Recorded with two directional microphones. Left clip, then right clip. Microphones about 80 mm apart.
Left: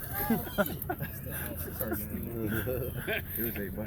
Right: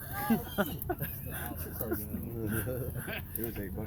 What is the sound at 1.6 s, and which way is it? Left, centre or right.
Speech, centre.